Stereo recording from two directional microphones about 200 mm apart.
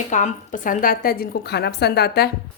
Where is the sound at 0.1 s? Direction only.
40° left (ahead or behind).